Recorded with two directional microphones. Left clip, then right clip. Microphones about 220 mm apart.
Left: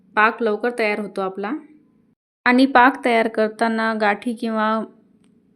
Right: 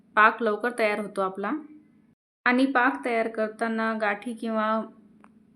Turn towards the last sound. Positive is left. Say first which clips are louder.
# left 5 dB
turn(degrees=25)  # may be behind; listen again after turning